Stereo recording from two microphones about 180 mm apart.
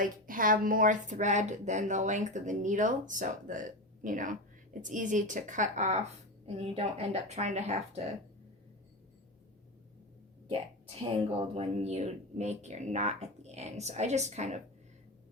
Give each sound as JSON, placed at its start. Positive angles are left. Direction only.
{"t": 0.0, "sound": "a woman's voice", "side_deg": -50}
{"t": 11.5, "sound": "speech", "side_deg": -35}